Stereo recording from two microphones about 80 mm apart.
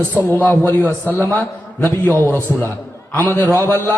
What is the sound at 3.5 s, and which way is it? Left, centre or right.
Speech, left.